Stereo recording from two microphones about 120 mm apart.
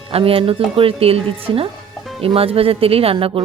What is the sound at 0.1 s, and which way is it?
Speech, 50° right (ahead or behind).